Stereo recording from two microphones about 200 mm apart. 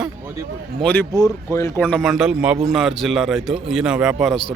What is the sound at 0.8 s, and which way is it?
A man's voice, 5° left (ahead or behind).